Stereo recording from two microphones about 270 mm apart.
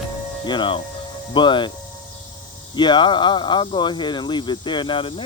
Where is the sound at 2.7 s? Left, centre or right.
Centre.